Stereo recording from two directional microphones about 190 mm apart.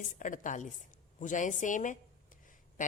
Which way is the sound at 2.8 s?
40° left (ahead or behind).